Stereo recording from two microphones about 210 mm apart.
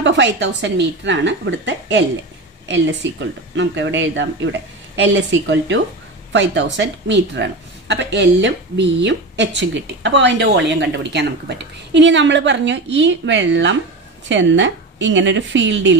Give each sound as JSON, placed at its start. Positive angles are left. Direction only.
{"t": 0.0, "sound": "speech", "side_deg": -55}